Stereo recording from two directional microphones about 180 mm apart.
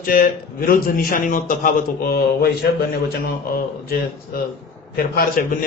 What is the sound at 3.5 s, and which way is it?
A man's voice, 55° left (ahead or behind).